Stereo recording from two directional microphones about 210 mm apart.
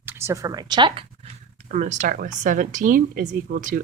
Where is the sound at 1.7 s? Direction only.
35° right (ahead or behind).